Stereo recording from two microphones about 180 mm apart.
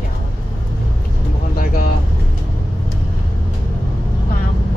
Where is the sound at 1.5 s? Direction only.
55° left (ahead or behind).